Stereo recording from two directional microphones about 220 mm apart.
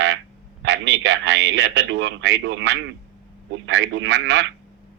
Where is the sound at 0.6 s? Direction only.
50° right (ahead or behind).